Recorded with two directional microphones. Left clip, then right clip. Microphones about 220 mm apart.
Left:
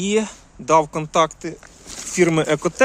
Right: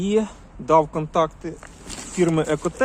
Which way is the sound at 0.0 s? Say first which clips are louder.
Left 1 dB; 40° left (ahead or behind).